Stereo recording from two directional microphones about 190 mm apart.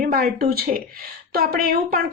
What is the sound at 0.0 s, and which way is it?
Speech, 45° right (ahead or behind).